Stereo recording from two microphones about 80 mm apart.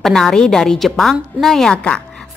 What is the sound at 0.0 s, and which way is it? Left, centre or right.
A woman's voice, centre.